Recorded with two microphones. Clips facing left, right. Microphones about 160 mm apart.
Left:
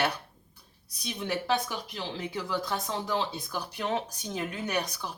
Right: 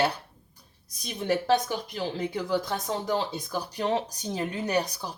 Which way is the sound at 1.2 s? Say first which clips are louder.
Right 5 dB; 45° right (ahead or behind).